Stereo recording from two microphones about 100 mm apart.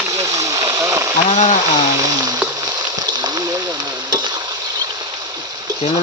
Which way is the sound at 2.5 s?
40° right (ahead or behind).